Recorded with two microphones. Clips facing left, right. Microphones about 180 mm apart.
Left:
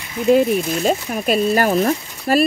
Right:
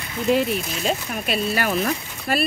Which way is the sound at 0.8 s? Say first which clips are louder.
Left 6 dB; 45° left (ahead or behind).